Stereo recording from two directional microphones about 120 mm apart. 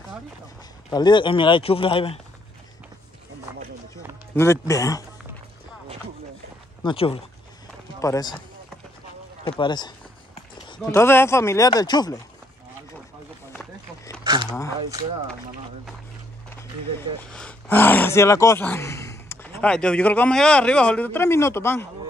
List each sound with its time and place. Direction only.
0.9 s speech: 40° left (ahead or behind)
4.4 s speech: 25° left (ahead or behind)
6.8 s speech: 45° left (ahead or behind)
8.0 s speech: 30° left (ahead or behind)
9.6 s speech: 40° left (ahead or behind)
10.9 s speech: 20° left (ahead or behind)
14.2 s a sound: 40° right (ahead or behind)
14.5 s speech: 30° left (ahead or behind)
17.3 s a man's voice: 10° left (ahead or behind); by 18.6 s 25° left (ahead or behind)
18.6 s a sound: 20° left (ahead or behind)
19.7 s a man's voice: 10° left (ahead or behind)